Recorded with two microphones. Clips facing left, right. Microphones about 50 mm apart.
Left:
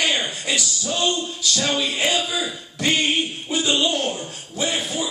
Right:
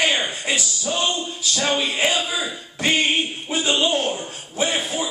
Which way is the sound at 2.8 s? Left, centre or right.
Centre.